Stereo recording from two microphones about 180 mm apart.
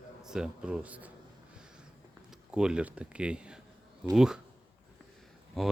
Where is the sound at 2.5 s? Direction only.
5° right (ahead or behind).